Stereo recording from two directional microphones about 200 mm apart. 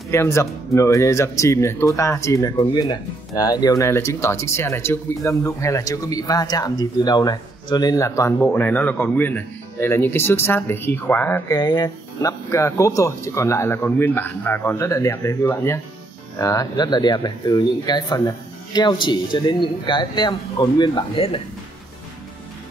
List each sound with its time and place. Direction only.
0.1 s speech: 15° left (ahead or behind)